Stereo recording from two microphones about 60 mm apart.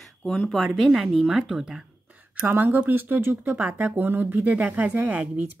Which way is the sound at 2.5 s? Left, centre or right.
Right.